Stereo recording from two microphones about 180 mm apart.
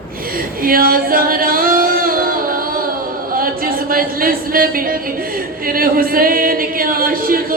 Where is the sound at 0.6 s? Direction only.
55° right (ahead or behind).